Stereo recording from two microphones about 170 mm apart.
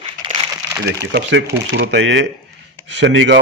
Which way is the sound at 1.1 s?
90° right.